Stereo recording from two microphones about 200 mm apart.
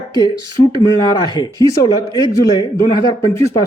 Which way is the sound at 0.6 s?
30° left (ahead or behind).